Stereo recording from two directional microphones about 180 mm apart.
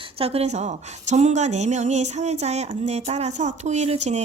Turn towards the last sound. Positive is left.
turn(degrees=-40)  # may be behind; listen again after turning